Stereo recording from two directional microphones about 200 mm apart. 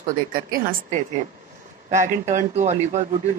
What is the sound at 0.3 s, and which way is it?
A woman's voice, 45° right (ahead or behind).